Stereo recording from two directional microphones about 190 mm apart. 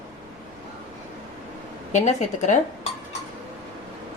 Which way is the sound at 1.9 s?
40° left (ahead or behind).